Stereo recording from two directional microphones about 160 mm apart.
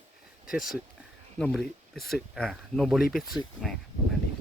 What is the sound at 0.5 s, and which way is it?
Speech, centre (ahead or behind).